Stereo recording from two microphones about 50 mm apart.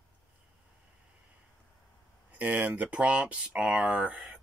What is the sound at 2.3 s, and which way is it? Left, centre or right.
Speech, right.